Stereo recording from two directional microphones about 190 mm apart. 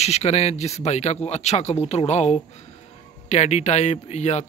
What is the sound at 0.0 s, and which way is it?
Speech, 35° left (ahead or behind).